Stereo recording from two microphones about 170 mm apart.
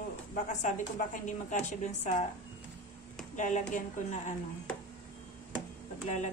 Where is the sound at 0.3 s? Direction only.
45° left (ahead or behind).